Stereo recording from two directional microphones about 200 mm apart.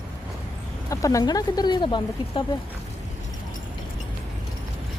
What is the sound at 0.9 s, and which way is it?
Speech, 15° left (ahead or behind).